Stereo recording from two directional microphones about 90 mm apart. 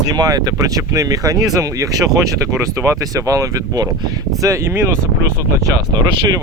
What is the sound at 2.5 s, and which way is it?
Speech, 25° right (ahead or behind).